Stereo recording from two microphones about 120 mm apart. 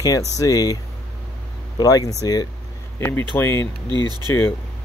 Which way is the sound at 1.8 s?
30° left (ahead or behind).